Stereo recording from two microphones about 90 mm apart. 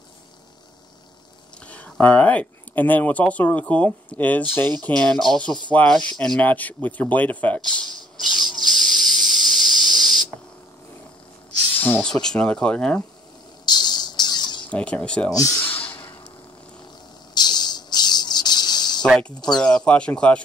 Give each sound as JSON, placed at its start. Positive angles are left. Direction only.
{"t": 1.7, "sound": "speech", "side_deg": 15}
{"t": 7.6, "sound": "a sound", "side_deg": 5}
{"t": 11.8, "sound": "speech", "side_deg": 20}
{"t": 12.1, "sound": "speech", "side_deg": 10}
{"t": 13.7, "sound": "a sound", "side_deg": 50}
{"t": 14.7, "sound": "speech", "side_deg": 15}
{"t": 15.3, "sound": "speech", "side_deg": 40}
{"t": 15.6, "sound": "sigh", "side_deg": 20}
{"t": 17.3, "sound": "a sound", "side_deg": 50}
{"t": 19.5, "sound": "speech", "side_deg": 10}